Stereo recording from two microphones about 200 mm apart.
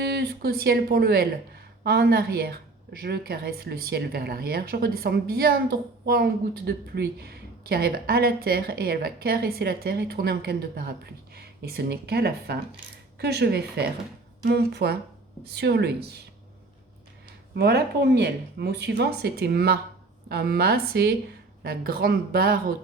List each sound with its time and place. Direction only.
0.0 s a woman's voice: 55° right (ahead or behind)
17.5 s a woman's voice: 55° right (ahead or behind)